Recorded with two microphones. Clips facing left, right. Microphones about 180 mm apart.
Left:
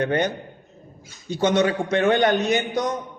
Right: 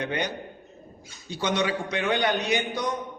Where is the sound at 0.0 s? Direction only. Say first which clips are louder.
Left 7 dB; 50° left (ahead or behind).